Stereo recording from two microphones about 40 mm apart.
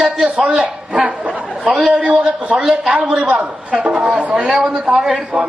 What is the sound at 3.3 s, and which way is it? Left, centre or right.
Speech, right.